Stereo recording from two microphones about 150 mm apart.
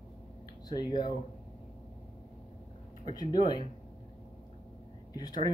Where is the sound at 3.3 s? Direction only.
30° left (ahead or behind).